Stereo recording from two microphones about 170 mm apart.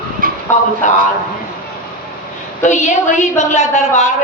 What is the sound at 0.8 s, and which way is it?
Speech, 45° left (ahead or behind).